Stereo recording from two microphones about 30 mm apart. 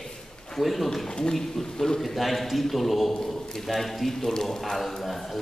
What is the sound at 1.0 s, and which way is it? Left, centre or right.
Speech, left.